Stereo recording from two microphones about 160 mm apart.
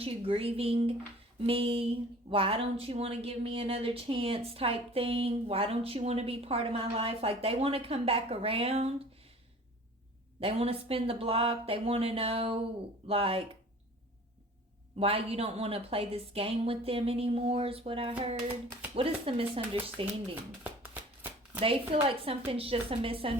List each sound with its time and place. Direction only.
0.0 s speech: 35° right (ahead or behind)
10.4 s speech: 35° right (ahead or behind)
14.9 s speech: 35° right (ahead or behind)
21.6 s speech: 35° right (ahead or behind)